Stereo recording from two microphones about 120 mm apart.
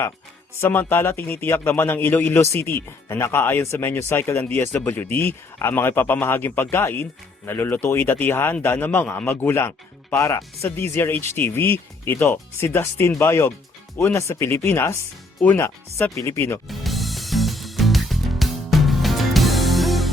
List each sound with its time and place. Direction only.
0.6 s a man's voice: 15° left (ahead or behind)
16.6 s music: centre (ahead or behind)